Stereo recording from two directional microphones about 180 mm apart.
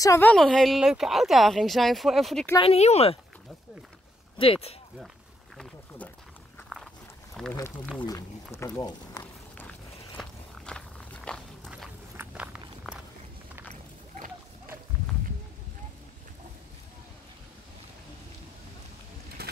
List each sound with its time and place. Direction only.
0.0 s speech: 15° left (ahead or behind)
2.6 s speech: 35° left (ahead or behind)
4.4 s speech: 35° left (ahead or behind)
7.4 s speech: centre (ahead or behind)
8.0 s speech: 20° left (ahead or behind)
9.2 s walk: 10° left (ahead or behind)
19.4 s a sound: 60° right (ahead or behind)